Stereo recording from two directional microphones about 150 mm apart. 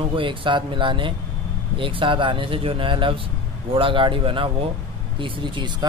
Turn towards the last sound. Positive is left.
turn(degrees=-35)  # may be behind; listen again after turning